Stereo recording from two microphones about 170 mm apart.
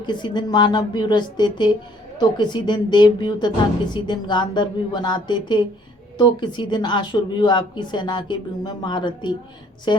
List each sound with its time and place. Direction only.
0.0 s a woman's voice: 25° left (ahead or behind)